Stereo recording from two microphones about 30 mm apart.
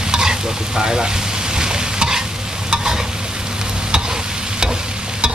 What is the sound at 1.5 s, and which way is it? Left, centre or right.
Stir, right.